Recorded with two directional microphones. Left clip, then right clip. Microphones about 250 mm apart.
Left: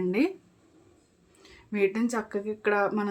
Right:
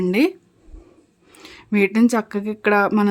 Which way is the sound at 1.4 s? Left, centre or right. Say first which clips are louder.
Right 7 dB; right.